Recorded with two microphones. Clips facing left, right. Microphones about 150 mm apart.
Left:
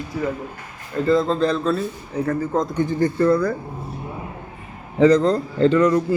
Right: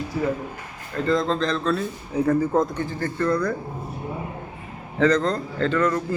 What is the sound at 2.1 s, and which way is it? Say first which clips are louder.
Speech: right 2 dB; 10° right (ahead or behind).